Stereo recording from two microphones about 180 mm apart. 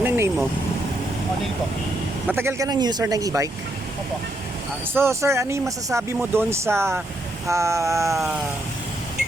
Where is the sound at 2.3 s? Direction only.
15° right (ahead or behind).